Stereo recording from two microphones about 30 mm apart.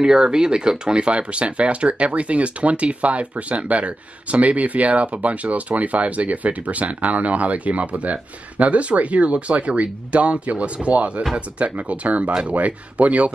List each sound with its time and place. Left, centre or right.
0.0 s speech: right